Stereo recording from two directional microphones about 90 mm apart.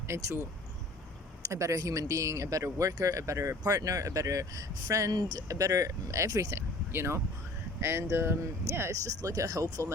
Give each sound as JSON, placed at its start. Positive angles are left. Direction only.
{"t": 0.1, "sound": "speech", "side_deg": -30}
{"t": 1.5, "sound": "speech", "side_deg": -35}